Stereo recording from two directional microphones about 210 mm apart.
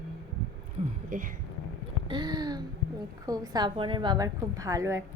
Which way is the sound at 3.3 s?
15° right (ahead or behind).